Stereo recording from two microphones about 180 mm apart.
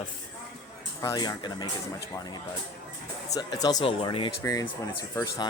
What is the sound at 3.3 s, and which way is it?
Speech, 20° left (ahead or behind).